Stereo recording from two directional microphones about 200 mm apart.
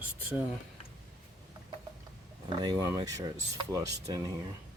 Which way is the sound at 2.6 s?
20° right (ahead or behind).